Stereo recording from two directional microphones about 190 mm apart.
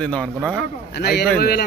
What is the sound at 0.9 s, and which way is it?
Speech, 60° left (ahead or behind).